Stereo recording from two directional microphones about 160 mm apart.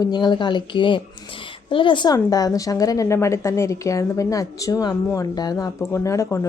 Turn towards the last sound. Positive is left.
turn(degrees=20)  # may be behind; listen again after turning